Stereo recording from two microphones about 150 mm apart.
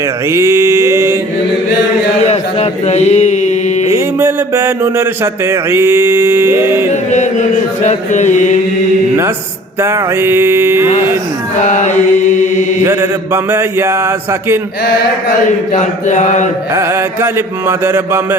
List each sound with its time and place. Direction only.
0.3 s mantra: 20° right (ahead or behind)
2.2 s mantra: 45° left (ahead or behind)
3.8 s speech: 20° right (ahead or behind)
6.9 s mantra: 50° left (ahead or behind)
9.8 s speech: 15° right (ahead or behind)
11.6 s mantra: 50° left (ahead or behind)
12.8 s speech: 15° right (ahead or behind)
15.7 s mantra: 50° left (ahead or behind)
16.7 s speech: 15° right (ahead or behind)